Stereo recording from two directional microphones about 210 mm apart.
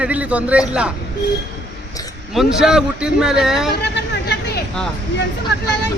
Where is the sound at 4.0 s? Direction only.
55° left (ahead or behind).